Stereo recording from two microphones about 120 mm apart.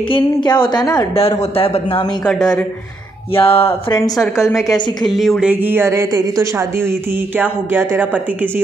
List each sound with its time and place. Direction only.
0.1 s a woman's voice: 45° left (ahead or behind)
1.4 s speech: 55° left (ahead or behind)
2.2 s speech: 5° left (ahead or behind)
3.3 s speech: 55° left (ahead or behind)
3.9 s a woman's voice: 30° left (ahead or behind)
5.1 s speech: centre (ahead or behind)
5.5 s speech: 15° right (ahead or behind)